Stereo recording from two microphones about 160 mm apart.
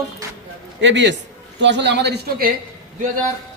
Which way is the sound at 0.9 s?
90° right.